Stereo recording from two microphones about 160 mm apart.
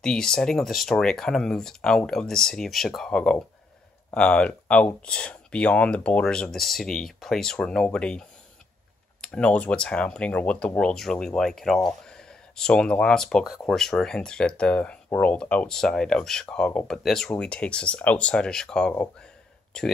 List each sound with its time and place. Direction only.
0.0 s speech: 5° left (ahead or behind)